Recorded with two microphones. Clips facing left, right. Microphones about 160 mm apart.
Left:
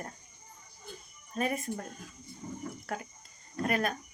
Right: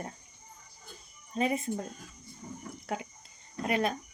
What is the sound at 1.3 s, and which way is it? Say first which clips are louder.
Speech: right 3 dB; 25° right (ahead or behind).